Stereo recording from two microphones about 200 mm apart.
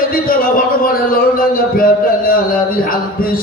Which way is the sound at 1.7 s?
45° left (ahead or behind).